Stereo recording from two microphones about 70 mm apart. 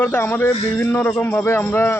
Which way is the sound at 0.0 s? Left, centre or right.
Left.